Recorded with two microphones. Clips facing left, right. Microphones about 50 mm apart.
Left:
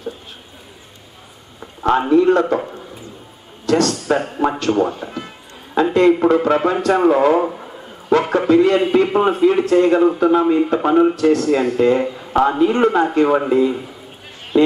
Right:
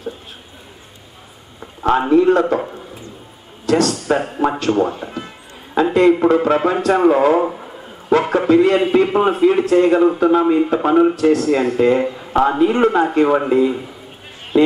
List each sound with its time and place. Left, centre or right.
1.6 s a man's voice: centre
3.6 s speech: centre
3.9 s a man's voice: centre